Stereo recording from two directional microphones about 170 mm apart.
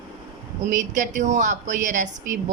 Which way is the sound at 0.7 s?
50° right (ahead or behind).